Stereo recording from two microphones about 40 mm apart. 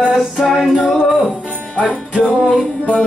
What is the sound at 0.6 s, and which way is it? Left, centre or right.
Music, centre.